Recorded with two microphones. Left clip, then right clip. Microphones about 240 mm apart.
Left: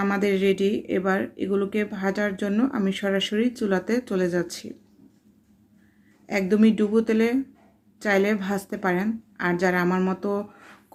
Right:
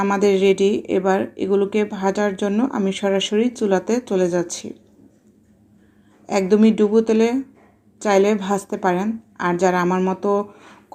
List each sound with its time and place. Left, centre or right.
0.0 s speech: centre
6.2 s speech: centre